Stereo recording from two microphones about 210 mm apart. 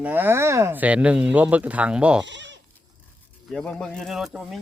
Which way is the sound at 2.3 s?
60° right (ahead or behind).